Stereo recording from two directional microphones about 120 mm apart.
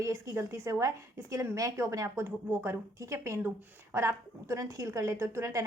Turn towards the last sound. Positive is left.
turn(degrees=-25)  # may be behind; listen again after turning